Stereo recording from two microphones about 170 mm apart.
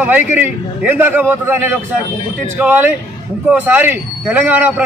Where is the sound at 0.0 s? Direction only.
10° right (ahead or behind).